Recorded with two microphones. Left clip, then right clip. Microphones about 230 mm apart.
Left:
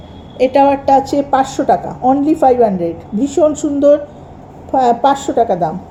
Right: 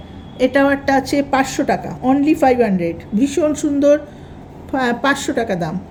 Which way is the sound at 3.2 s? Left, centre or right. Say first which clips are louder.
Left 4 dB; right.